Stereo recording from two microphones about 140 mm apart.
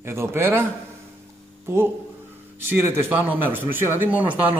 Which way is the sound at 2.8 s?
15° right (ahead or behind).